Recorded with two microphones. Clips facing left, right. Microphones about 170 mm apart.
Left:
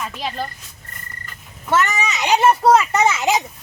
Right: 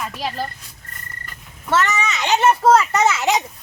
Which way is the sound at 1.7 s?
15° left (ahead or behind).